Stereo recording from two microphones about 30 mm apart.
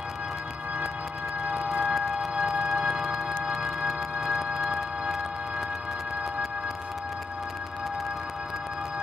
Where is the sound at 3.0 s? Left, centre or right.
Centre.